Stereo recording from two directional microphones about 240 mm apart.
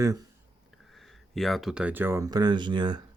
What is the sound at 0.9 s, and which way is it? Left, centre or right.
Speech, centre.